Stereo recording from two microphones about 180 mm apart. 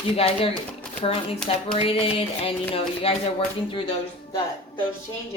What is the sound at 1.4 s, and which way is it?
Speech, 30° left (ahead or behind).